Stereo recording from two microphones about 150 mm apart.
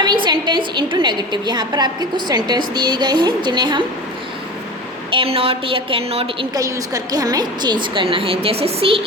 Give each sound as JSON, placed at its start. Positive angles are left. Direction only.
{"t": 0.0, "sound": "a woman's voice", "side_deg": -30}
{"t": 5.1, "sound": "a woman's voice", "side_deg": -40}
{"t": 6.6, "sound": "a woman's voice", "side_deg": -20}